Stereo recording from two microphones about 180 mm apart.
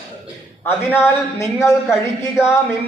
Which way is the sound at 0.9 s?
15° left (ahead or behind).